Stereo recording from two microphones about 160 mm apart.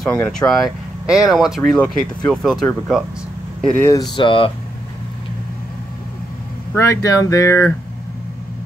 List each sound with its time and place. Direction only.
0.0 s speech: 5° left (ahead or behind)
3.6 s speech: 15° left (ahead or behind)
4.1 s speech: 30° left (ahead or behind)
6.7 s speech: 20° left (ahead or behind)